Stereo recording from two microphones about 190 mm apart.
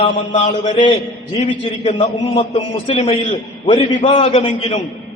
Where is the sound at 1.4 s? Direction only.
35° left (ahead or behind).